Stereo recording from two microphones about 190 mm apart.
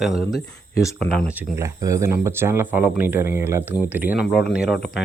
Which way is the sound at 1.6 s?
15° right (ahead or behind).